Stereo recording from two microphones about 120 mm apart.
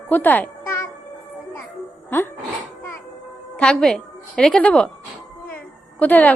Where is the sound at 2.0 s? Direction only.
15° left (ahead or behind).